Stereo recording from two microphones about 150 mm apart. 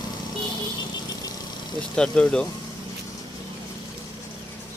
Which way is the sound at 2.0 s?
5° left (ahead or behind).